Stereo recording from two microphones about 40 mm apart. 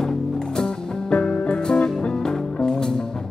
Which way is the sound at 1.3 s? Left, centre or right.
Left.